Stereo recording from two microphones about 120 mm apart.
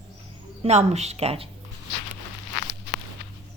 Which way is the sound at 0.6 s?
65° right (ahead or behind).